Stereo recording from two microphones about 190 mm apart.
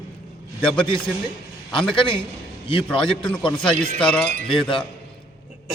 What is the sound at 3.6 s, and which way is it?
Speech, 5° left (ahead or behind).